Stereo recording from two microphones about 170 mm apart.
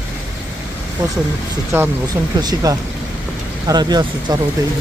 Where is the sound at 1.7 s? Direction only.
15° right (ahead or behind).